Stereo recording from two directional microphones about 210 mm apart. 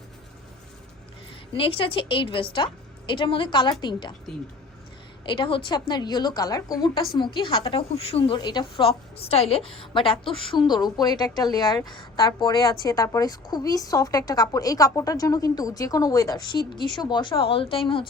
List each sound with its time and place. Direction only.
1.5 s a woman's voice: 25° left (ahead or behind)
5.2 s a woman's voice: 20° left (ahead or behind)